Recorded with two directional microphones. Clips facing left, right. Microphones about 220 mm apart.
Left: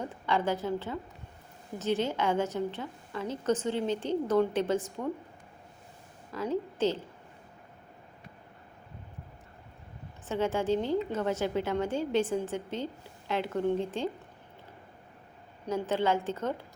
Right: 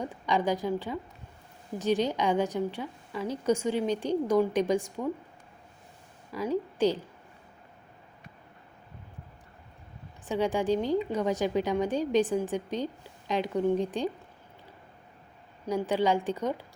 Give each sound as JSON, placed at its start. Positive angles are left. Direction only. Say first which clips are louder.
{"t": 0.0, "sound": "a woman's voice", "louder": "right 2 dB", "side_deg": -15}
{"t": 6.3, "sound": "a woman's voice", "louder": "right 2 dB", "side_deg": -15}
{"t": 10.2, "sound": "a woman's voice", "louder": "right 2 dB", "side_deg": -15}
{"t": 15.6, "sound": "a woman's voice", "louder": "right 2 dB", "side_deg": -15}